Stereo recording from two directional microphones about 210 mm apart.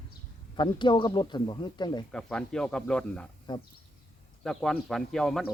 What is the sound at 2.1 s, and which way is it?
Speech, 5° left (ahead or behind).